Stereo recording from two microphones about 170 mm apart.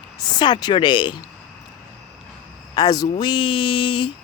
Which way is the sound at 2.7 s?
25° left (ahead or behind).